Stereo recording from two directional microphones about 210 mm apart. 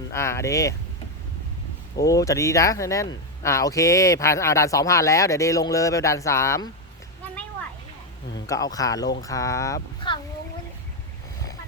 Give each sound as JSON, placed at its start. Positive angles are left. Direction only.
{"t": 0.1, "sound": "speech", "side_deg": 15}
{"t": 2.0, "sound": "speech", "side_deg": 15}
{"t": 8.4, "sound": "speech", "side_deg": 15}